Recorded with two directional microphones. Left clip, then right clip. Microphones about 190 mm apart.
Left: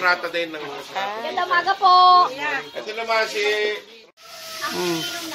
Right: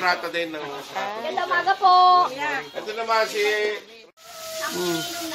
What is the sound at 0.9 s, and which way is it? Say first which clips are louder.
Speech: left 3 dB; 10° right (ahead or behind).